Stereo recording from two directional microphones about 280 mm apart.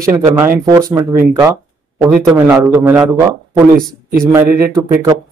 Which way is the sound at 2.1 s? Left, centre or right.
Centre.